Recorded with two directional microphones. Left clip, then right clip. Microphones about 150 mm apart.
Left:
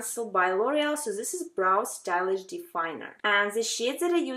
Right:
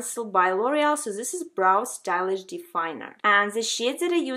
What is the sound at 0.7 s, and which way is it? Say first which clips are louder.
Speech: right 4 dB; 35° right (ahead or behind).